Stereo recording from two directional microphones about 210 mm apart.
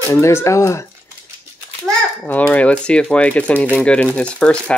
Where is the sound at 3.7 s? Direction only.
5° left (ahead or behind).